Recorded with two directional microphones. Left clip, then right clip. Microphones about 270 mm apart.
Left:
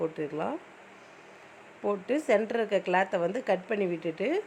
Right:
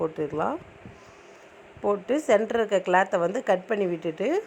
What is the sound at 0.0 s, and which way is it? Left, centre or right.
Speech, centre.